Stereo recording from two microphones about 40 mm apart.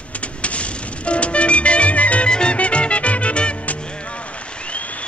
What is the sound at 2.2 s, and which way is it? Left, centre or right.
Music, left.